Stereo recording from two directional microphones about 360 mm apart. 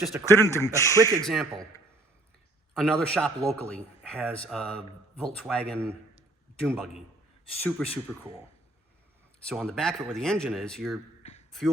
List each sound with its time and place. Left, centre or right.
0.0 s speech: centre
2.7 s speech: centre
9.5 s speech: centre
11.2 s a sound: centre